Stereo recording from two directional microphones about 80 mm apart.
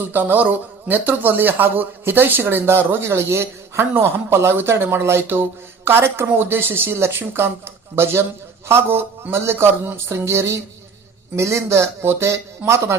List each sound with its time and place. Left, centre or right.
0.0 s speech: right